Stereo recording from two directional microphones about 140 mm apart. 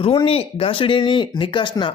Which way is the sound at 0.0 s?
40° left (ahead or behind).